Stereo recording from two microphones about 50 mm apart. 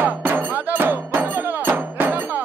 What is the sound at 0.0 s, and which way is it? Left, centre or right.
Music, right.